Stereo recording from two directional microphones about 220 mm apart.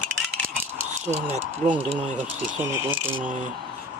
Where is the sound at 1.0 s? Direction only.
30° right (ahead or behind).